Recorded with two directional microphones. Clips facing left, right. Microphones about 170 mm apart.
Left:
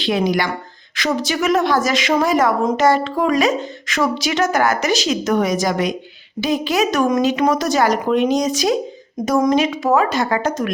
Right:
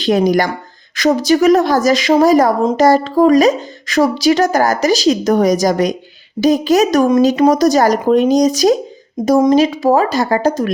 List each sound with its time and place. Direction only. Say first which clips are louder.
0.0 s a woman's voice: right 6 dB; 45° right (ahead or behind)